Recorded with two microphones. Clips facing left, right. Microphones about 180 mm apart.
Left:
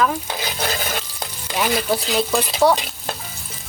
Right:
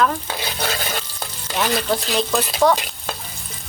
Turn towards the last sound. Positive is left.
turn(degrees=5)  # may be behind; listen again after turning